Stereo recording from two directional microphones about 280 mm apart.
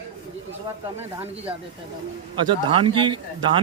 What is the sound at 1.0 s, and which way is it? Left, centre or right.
Speech, centre.